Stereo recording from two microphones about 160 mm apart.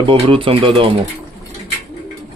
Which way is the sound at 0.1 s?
35° right (ahead or behind).